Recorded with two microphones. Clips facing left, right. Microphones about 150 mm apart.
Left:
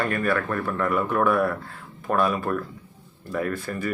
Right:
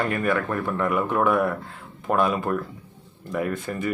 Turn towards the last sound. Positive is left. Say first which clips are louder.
# right 1 dB
turn(degrees=-20)  # may be behind; listen again after turning